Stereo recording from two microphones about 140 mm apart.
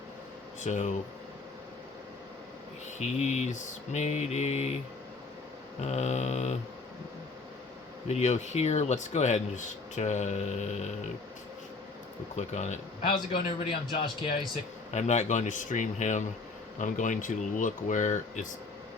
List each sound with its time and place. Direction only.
0.6 s speech: 60° left (ahead or behind)
3.0 s mantra: 55° left (ahead or behind)
5.8 s mantra: 50° left (ahead or behind)
8.0 s speech: 55° left (ahead or behind)
12.4 s speech: 55° left (ahead or behind)
13.1 s a man's voice: 35° left (ahead or behind)
14.9 s speech: 55° left (ahead or behind)